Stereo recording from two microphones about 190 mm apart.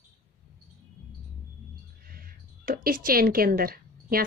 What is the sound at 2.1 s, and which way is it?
Speech, 50° right (ahead or behind).